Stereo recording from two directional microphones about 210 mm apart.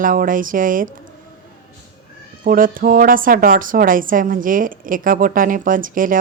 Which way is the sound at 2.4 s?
40° right (ahead or behind).